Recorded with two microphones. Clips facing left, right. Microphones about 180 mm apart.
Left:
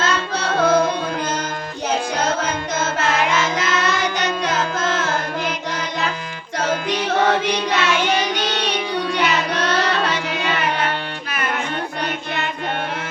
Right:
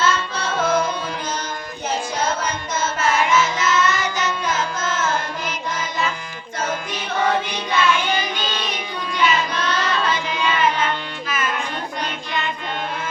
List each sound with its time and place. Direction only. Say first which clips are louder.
0.0 s music: even; 65° left (ahead or behind)
3.1 s carnatic music: right 2 dB; 65° left (ahead or behind)
6.6 s music: left 5 dB; 70° left (ahead or behind)